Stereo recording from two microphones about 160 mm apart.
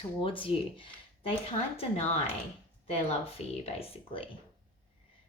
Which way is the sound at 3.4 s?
40° left (ahead or behind).